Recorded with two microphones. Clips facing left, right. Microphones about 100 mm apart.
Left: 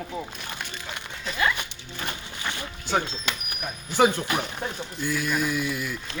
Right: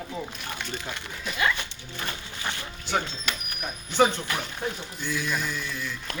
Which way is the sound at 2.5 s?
20° left (ahead or behind).